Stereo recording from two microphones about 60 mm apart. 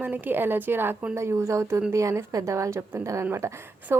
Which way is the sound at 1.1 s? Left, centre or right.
Right.